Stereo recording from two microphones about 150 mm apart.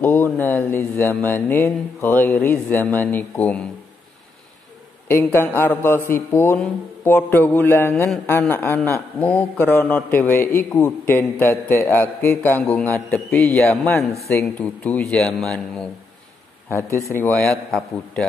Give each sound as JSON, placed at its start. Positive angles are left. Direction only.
{"t": 0.0, "sound": "a man's voice", "side_deg": 10}
{"t": 5.0, "sound": "a man's voice", "side_deg": 15}
{"t": 16.6, "sound": "a man's voice", "side_deg": 20}
{"t": 17.3, "sound": "a man's voice", "side_deg": 0}